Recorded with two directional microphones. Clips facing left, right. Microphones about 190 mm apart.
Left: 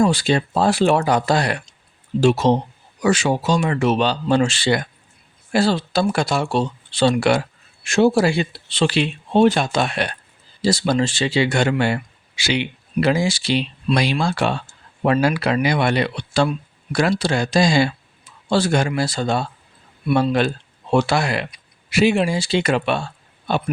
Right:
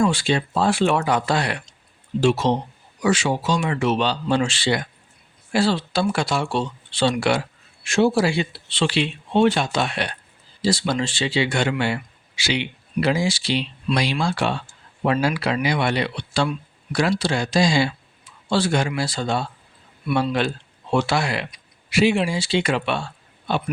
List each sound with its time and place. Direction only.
0.0 s speech: 40° left (ahead or behind)